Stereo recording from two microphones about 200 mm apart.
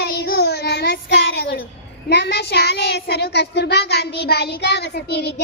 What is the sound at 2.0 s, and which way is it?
A child's voice, 55° left (ahead or behind).